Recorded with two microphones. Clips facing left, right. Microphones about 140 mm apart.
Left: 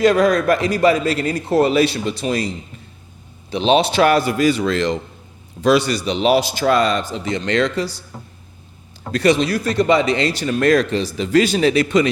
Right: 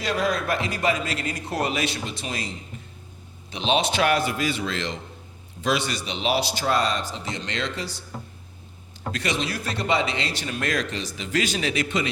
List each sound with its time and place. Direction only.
0.0 s speech: 45° left (ahead or behind)
6.7 s speech: 65° left (ahead or behind); by 8.0 s 40° left (ahead or behind)
9.1 s speech: 35° left (ahead or behind)